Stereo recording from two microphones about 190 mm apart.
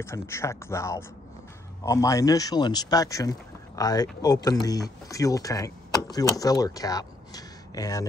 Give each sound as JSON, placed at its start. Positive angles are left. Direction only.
{"t": 0.0, "sound": "speech", "side_deg": 15}